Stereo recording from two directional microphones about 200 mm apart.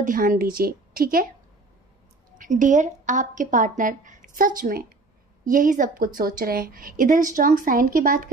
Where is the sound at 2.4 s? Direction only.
40° right (ahead or behind).